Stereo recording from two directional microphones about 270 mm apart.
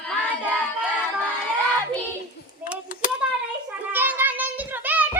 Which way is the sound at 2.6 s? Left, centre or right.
Centre.